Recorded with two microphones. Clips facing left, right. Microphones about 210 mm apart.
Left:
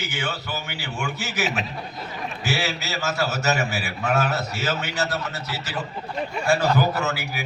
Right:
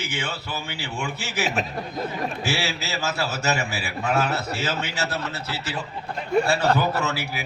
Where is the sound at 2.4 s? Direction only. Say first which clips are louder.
Even; 30° right (ahead or behind).